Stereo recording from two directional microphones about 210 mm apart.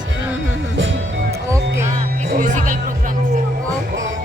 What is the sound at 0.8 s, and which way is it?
Music, 60° right (ahead or behind).